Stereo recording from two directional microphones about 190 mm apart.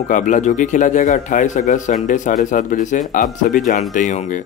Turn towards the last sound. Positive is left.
turn(degrees=40)  # may be behind; listen again after turning